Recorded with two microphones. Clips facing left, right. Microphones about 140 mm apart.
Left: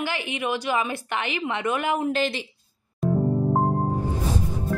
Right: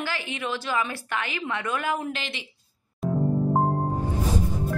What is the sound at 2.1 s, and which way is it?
Speech, 40° left (ahead or behind).